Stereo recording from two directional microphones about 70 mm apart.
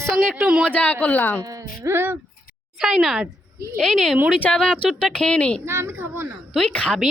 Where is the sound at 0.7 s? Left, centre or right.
Left.